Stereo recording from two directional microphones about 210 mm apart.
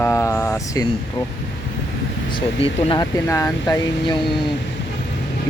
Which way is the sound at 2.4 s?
25° left (ahead or behind).